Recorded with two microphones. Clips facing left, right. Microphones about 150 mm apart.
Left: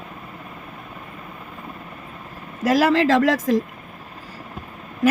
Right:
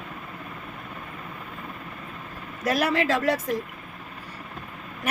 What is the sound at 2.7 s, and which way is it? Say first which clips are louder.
Speech: left 6 dB; 90° left.